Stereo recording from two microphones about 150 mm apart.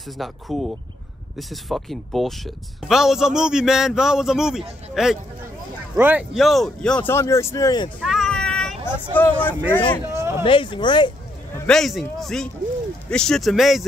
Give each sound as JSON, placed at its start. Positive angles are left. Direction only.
{"t": 0.2, "sound": "speech", "side_deg": 0}
{"t": 6.3, "sound": "speech", "side_deg": 0}
{"t": 8.0, "sound": "a sound", "side_deg": 0}
{"t": 8.8, "sound": "speech", "side_deg": 15}
{"t": 10.1, "sound": "speech", "side_deg": -20}
{"t": 10.4, "sound": "speech", "side_deg": 35}
{"t": 11.6, "sound": "speech", "side_deg": 5}